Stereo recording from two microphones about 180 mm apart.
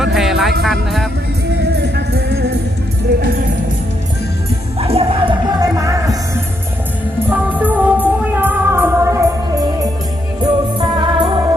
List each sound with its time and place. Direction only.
0.0 s music: centre (ahead or behind)
1.8 s music: 65° right (ahead or behind)
4.8 s music: 30° right (ahead or behind)
7.3 s music: 10° right (ahead or behind); by 11.3 s 25° right (ahead or behind)